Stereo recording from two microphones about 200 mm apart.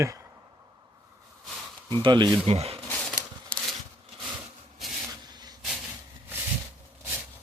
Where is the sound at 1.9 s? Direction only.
25° right (ahead or behind).